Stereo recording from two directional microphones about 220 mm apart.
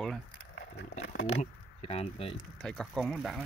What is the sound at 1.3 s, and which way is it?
Speech, 30° left (ahead or behind).